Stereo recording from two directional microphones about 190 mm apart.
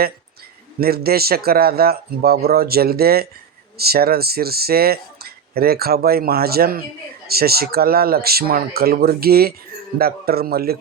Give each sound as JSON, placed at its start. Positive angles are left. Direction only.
{"t": 0.8, "sound": "speech", "side_deg": -55}